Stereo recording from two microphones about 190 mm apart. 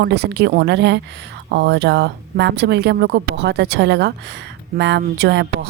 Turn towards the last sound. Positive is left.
turn(degrees=-60)  # may be behind; listen again after turning